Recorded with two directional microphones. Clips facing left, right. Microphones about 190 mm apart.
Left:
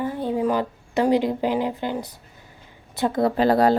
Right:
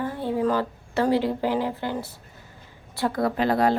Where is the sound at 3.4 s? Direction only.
35° left (ahead or behind).